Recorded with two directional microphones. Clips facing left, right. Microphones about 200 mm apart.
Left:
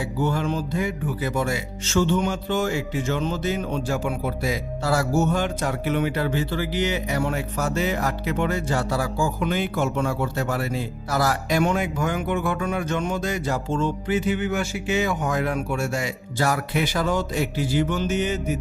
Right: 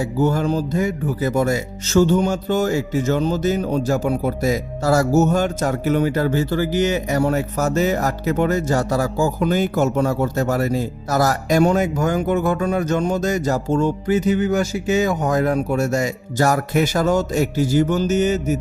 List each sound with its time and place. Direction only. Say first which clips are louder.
0.0 s speech: right 5 dB; 40° right (ahead or behind)